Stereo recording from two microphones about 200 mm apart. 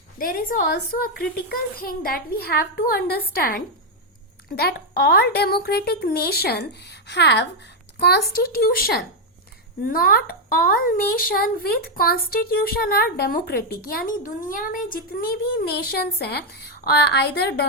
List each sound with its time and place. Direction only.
0.2 s speech: 45° left (ahead or behind)